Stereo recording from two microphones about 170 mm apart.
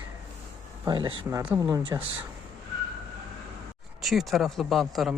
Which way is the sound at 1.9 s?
20° right (ahead or behind).